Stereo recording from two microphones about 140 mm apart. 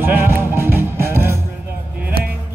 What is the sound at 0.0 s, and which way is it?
Music, 15° right (ahead or behind).